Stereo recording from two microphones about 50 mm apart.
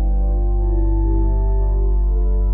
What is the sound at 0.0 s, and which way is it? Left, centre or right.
Music, centre.